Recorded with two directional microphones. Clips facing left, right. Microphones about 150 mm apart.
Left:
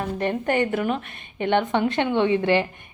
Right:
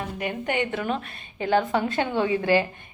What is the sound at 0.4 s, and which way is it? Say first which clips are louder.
Speech: left 4 dB; 40° left (ahead or behind).